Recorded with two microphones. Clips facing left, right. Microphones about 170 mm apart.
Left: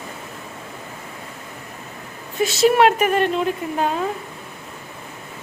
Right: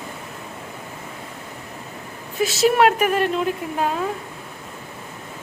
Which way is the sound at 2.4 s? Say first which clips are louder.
Left 2 dB; centre (ahead or behind).